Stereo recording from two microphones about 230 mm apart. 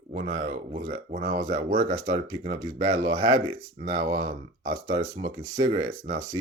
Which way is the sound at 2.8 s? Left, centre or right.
Centre.